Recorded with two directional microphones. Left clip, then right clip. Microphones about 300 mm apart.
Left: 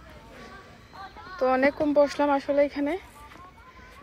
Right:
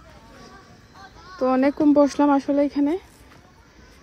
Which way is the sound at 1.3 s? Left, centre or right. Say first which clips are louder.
Right 2 dB; centre.